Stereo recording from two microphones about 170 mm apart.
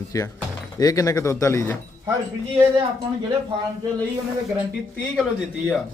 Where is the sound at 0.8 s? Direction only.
20° left (ahead or behind).